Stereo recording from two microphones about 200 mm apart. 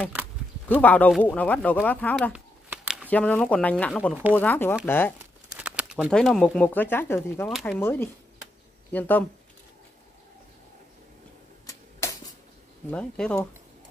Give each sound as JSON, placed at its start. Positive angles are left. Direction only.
{"t": 0.0, "sound": "a sound", "side_deg": -10}
{"t": 0.7, "sound": "speech", "side_deg": 10}
{"t": 2.3, "sound": "a sound", "side_deg": -5}
{"t": 3.1, "sound": "speech", "side_deg": 5}
{"t": 4.4, "sound": "speech", "side_deg": 10}
{"t": 5.2, "sound": "speech", "side_deg": -5}
{"t": 7.4, "sound": "speech", "side_deg": 0}
{"t": 7.8, "sound": "speech", "side_deg": 10}
{"t": 11.6, "sound": "a sound", "side_deg": 15}
{"t": 12.9, "sound": "speech", "side_deg": 5}